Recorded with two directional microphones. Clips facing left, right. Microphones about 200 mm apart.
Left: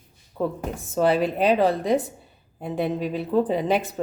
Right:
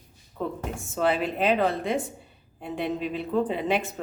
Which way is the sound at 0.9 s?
40° left (ahead or behind).